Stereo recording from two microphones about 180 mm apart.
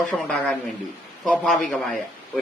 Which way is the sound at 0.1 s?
5° right (ahead or behind).